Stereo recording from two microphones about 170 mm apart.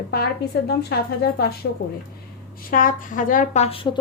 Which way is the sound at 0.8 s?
70° left (ahead or behind).